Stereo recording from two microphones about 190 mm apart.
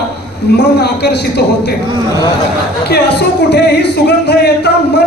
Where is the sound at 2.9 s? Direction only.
60° left (ahead or behind).